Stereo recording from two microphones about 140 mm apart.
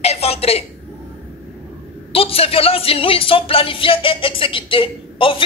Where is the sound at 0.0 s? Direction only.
45° left (ahead or behind).